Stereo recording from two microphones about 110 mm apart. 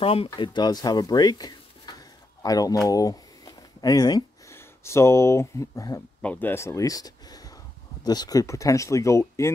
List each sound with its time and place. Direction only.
0.0 s speech: 60° left (ahead or behind)
0.4 s speech: 45° left (ahead or behind)
4.5 s speech: 25° left (ahead or behind)
6.2 s speech: 20° left (ahead or behind)